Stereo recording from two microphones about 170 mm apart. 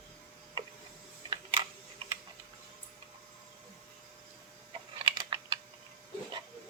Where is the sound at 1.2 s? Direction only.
25° right (ahead or behind).